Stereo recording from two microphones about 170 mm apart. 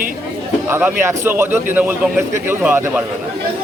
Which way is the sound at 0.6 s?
15° right (ahead or behind).